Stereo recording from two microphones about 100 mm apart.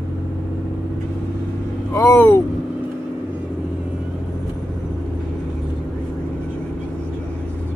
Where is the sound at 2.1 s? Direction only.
15° left (ahead or behind).